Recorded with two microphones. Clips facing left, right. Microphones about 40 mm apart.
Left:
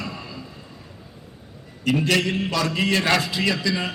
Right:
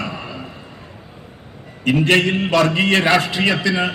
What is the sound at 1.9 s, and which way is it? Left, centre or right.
A man's voice, right.